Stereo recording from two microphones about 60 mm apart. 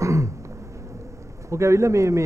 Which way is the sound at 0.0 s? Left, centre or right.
Right.